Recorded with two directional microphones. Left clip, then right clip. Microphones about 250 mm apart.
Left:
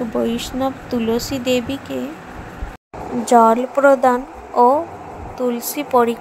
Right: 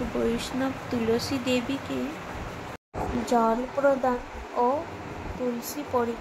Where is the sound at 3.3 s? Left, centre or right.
Left.